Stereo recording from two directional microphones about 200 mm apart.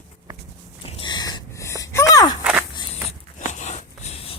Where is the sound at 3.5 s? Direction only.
35° left (ahead or behind).